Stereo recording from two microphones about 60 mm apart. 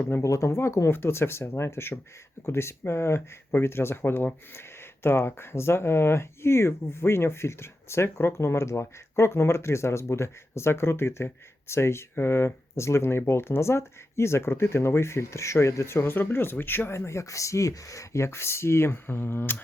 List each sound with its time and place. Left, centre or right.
0.2 s speech: left
0.9 s speech: left